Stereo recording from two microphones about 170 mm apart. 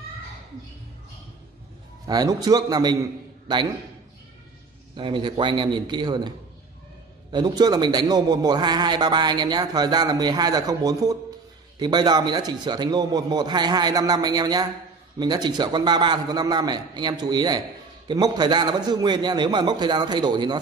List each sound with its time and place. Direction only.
2.0 s a man's voice: 20° right (ahead or behind)
4.9 s a man's voice: 30° right (ahead or behind)